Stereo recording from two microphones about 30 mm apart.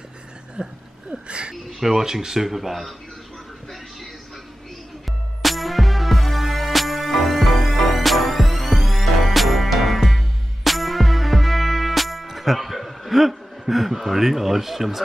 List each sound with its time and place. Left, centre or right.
0.6 s a sound: right
1.5 s speech: centre
5.4 s music: centre